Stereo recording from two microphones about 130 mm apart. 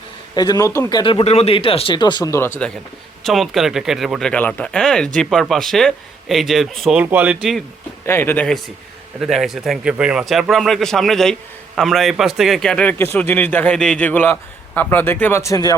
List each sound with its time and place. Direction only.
0.3 s a man's voice: 30° left (ahead or behind)
1.2 s speech: 55° left (ahead or behind); by 2.3 s 35° left (ahead or behind)
2.3 s speech: 15° left (ahead or behind)
3.2 s speech: centre (ahead or behind)
6.9 s speech: 15° right (ahead or behind)
8.0 s speech: 20° left (ahead or behind)
9.2 s speech: centre (ahead or behind); by 15.7 s 25° left (ahead or behind)